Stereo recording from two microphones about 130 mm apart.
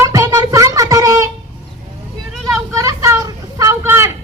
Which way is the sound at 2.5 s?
25° right (ahead or behind).